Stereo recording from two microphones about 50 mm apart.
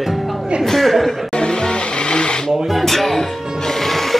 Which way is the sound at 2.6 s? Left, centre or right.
Centre.